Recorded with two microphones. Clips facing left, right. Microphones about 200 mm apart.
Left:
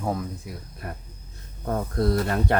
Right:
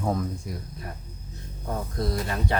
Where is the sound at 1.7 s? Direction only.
55° left (ahead or behind).